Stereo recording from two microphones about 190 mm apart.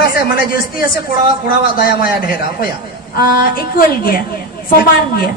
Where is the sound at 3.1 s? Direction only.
50° left (ahead or behind).